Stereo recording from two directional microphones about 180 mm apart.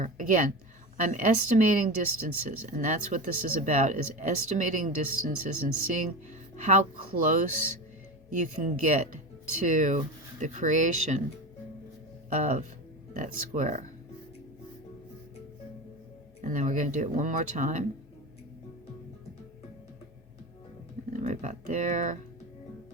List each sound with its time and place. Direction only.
0.0 s a woman's voice: 45° right (ahead or behind)
7.2 s speech: 45° right (ahead or behind)
12.3 s speech: 40° right (ahead or behind)
16.4 s speech: 45° right (ahead or behind)
21.1 s speech: 40° right (ahead or behind)